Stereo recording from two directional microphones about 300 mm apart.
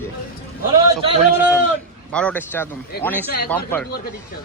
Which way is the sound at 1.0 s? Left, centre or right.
Centre.